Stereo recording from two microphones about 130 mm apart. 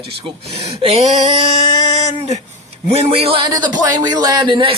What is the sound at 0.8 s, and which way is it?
Speech, 55° right (ahead or behind).